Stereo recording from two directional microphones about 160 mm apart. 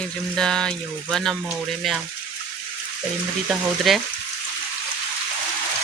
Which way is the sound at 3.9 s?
Centre (ahead or behind).